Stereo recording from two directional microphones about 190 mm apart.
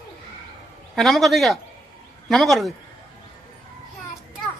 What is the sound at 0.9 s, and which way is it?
Speech, centre (ahead or behind).